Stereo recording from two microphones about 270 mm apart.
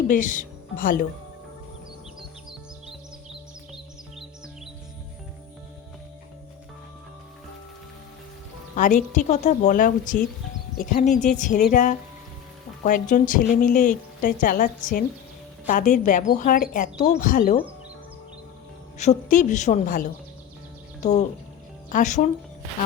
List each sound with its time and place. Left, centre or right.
0.1 s speech: left
8.7 s a woman's voice: left
18.9 s a woman's voice: left